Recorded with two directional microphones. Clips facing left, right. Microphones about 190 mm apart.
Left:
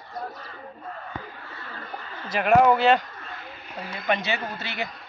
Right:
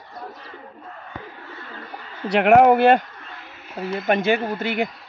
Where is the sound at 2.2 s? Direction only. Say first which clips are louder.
Right 5 dB; 70° right (ahead or behind); by 4.8 s 50° right (ahead or behind).